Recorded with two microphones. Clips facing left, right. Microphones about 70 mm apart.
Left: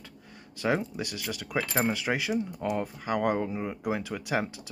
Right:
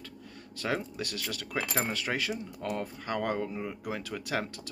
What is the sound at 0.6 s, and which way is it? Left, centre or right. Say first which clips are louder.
Speech: left 4 dB; centre.